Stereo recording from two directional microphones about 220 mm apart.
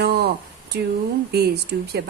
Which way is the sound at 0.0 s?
45° right (ahead or behind).